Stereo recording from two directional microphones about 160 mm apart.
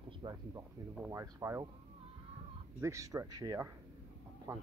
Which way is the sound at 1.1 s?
20° right (ahead or behind).